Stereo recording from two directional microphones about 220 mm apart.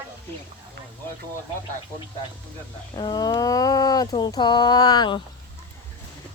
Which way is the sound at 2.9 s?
20° left (ahead or behind).